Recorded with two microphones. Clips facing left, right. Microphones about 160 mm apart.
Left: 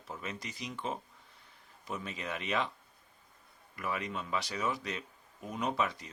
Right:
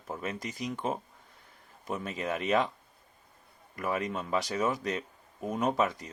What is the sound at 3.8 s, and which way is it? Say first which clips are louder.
Speech: right 5 dB; 45° right (ahead or behind).